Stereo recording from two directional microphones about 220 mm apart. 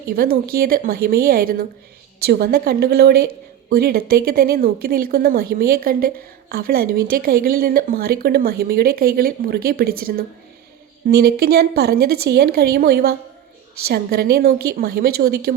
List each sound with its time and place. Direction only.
0.1 s speech: 40° right (ahead or behind)